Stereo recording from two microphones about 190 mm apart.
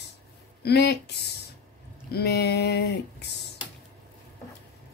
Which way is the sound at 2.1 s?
60° left (ahead or behind).